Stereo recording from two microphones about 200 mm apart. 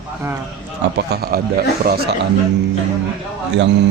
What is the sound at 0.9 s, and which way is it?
A man's voice, 50° right (ahead or behind).